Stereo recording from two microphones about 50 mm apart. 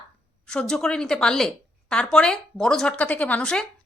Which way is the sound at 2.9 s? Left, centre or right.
Left.